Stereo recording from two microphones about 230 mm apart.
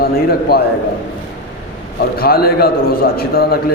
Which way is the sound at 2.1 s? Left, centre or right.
Left.